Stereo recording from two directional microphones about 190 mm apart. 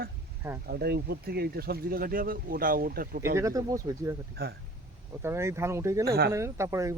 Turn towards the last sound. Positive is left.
turn(degrees=-15)  # may be behind; listen again after turning